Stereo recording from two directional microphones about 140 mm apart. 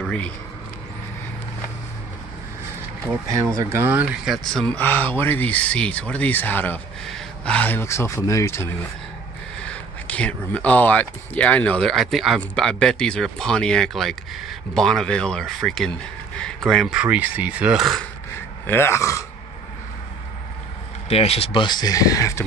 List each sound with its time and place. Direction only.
3.1 s speech: 20° right (ahead or behind); by 8.7 s 20° left (ahead or behind)
9.6 s speech: 10° left (ahead or behind)
18.7 s speech: 15° left (ahead or behind)
21.1 s speech: 45° left (ahead or behind); by 22.4 s 25° left (ahead or behind)